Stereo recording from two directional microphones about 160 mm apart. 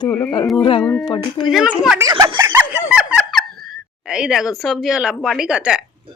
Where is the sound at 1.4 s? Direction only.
5° right (ahead or behind).